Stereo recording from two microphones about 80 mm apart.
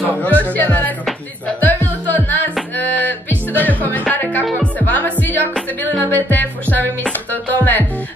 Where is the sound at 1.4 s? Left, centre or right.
Left.